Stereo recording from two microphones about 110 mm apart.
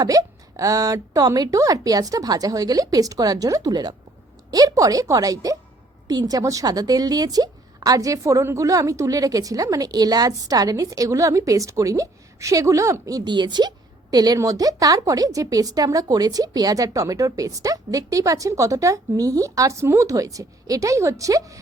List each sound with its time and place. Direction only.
0.0 s a woman's voice: 30° right (ahead or behind)